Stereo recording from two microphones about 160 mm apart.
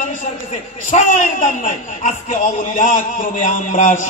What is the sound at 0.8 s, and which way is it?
A man's voice, 55° left (ahead or behind).